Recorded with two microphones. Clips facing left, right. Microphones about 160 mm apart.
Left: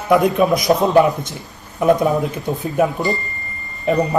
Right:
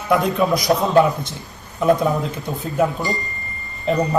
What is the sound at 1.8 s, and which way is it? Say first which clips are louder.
A man's voice: left 2 dB; 20° left (ahead or behind).